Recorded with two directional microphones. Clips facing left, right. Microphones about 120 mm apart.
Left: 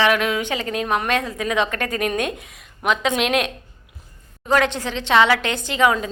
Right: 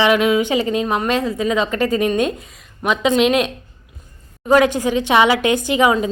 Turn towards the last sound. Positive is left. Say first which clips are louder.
# right 3 dB
turn(degrees=-15)  # may be behind; listen again after turning